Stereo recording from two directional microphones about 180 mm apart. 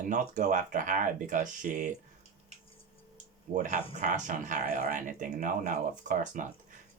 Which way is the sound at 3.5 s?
45° right (ahead or behind).